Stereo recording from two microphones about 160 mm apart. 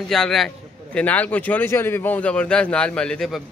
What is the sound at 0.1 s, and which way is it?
A man's voice, centre (ahead or behind).